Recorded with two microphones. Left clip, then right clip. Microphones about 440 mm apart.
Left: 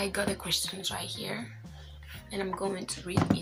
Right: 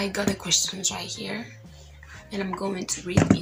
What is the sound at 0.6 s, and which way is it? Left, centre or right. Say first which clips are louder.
Speech: right 6 dB; left.